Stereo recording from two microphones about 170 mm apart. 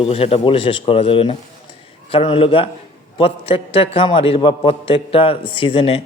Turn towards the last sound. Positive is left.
turn(degrees=35)  # may be behind; listen again after turning